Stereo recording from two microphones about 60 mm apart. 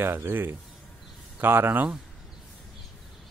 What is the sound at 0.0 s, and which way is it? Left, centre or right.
Speech, right.